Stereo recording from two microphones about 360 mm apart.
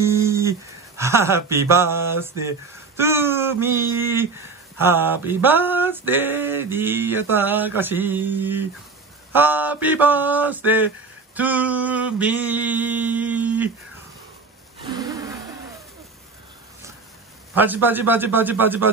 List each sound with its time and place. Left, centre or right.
0.0 s speech: centre
4.7 s male singing: centre
14.8 s a sound: centre
17.6 s male singing: centre